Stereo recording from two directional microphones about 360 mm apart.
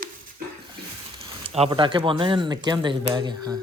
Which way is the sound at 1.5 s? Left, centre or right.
Centre.